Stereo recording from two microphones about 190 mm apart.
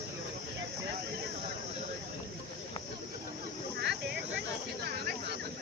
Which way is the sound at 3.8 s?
60° right (ahead or behind).